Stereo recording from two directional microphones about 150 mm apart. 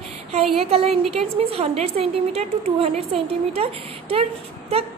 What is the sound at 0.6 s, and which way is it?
A woman's voice, 40° right (ahead or behind).